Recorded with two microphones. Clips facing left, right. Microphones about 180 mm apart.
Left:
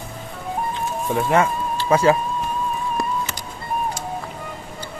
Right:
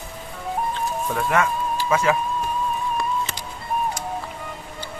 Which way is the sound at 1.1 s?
30° left (ahead or behind).